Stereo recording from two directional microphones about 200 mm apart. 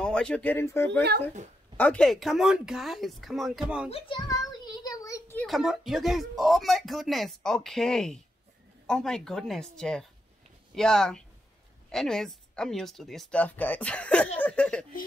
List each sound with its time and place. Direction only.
0.0 s speech: 5° left (ahead or behind)
3.9 s a sound: 20° left (ahead or behind)
5.5 s speech: centre (ahead or behind)